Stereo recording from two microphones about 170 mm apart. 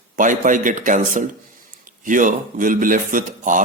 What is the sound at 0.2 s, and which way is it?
Speech, 50° right (ahead or behind).